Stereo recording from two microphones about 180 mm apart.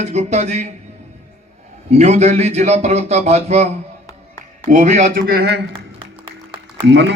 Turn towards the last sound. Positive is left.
turn(degrees=-75)  # may be behind; listen again after turning